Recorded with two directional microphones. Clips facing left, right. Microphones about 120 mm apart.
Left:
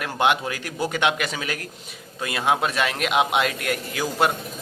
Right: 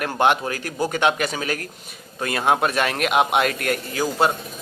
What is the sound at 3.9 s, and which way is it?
Speech, 35° right (ahead or behind).